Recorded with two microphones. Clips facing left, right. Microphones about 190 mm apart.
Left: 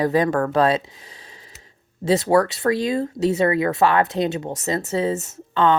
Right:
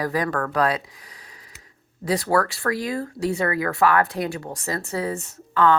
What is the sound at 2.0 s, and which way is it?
Speech, 25° left (ahead or behind).